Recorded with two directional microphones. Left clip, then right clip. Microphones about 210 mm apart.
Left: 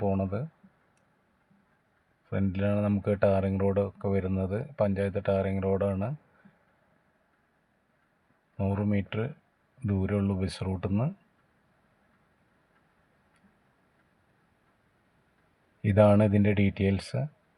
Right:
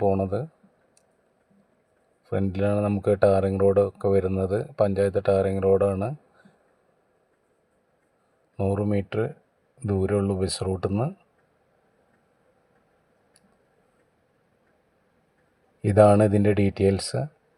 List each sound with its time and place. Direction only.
0.0 s speech: 25° right (ahead or behind)
2.3 s speech: 30° right (ahead or behind)
8.5 s speech: 30° right (ahead or behind)
15.8 s speech: 30° right (ahead or behind)